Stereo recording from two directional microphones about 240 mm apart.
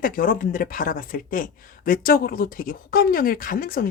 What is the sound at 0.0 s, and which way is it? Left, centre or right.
Speech, left.